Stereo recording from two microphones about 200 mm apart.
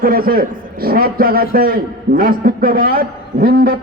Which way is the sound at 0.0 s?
50° right (ahead or behind).